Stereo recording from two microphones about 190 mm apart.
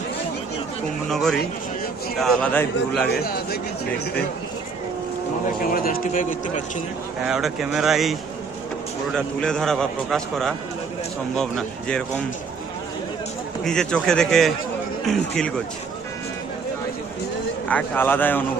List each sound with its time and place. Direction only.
1.1 s a man's voice: centre (ahead or behind)
3.1 s speech: 55° left (ahead or behind)
5.6 s speech: 50° left (ahead or behind)
7.3 s a man's voice: 5° right (ahead or behind)
9.1 s a man's voice: 5° left (ahead or behind)
13.7 s a man's voice: 5° left (ahead or behind)
17.7 s speech: 10° left (ahead or behind)